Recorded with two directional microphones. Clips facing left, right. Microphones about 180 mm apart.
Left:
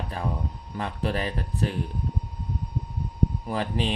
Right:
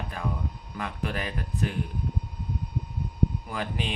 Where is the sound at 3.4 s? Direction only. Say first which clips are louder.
Left 5 dB; 35° left (ahead or behind).